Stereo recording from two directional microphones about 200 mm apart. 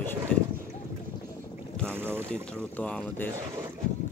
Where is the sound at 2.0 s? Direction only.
10° right (ahead or behind).